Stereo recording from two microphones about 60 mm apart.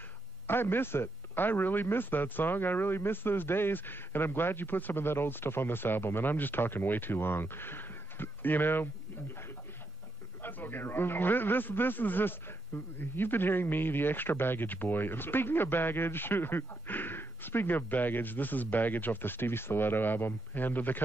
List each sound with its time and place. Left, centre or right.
0.5 s speech: left
10.4 s speech: left